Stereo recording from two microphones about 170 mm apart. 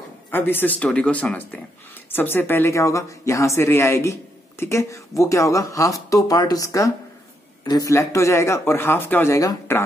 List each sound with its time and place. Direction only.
0.3 s speech: 10° left (ahead or behind)